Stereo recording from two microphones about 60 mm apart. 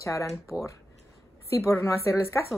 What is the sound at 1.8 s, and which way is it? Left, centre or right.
Speech, left.